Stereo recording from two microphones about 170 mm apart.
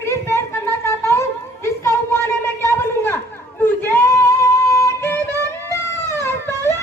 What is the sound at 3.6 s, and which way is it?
Chatter, 10° left (ahead or behind).